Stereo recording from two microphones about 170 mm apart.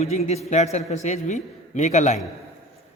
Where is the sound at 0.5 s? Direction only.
40° left (ahead or behind).